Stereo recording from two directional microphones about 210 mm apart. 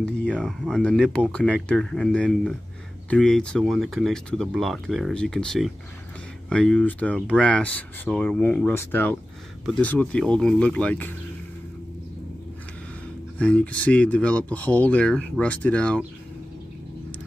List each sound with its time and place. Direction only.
0.0 s speech: 5° left (ahead or behind)
13.4 s speech: 5° left (ahead or behind)